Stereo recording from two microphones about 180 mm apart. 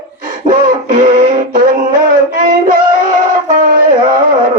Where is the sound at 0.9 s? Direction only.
50° right (ahead or behind).